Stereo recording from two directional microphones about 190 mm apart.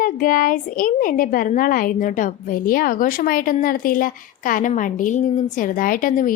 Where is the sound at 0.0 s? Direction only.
50° left (ahead or behind).